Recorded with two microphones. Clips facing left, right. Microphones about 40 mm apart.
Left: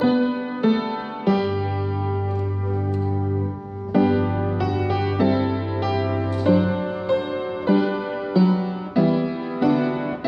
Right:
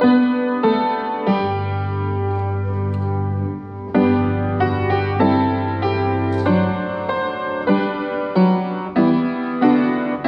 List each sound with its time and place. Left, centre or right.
0.0 s music: right
3.9 s music: centre